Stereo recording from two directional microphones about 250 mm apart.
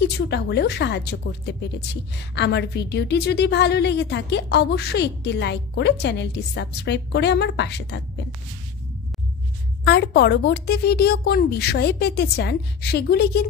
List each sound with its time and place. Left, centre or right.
0.0 s speech: left
9.8 s a woman's voice: left